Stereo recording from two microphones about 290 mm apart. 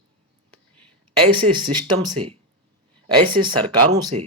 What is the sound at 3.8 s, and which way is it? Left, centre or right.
Speech, right.